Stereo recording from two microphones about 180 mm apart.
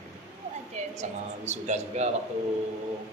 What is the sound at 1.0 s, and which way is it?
A man's voice, 40° right (ahead or behind).